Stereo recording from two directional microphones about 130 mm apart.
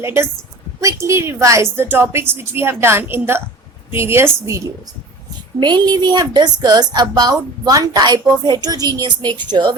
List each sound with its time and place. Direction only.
0.0 s a woman's voice: 20° right (ahead or behind)
5.5 s a woman's voice: 35° right (ahead or behind)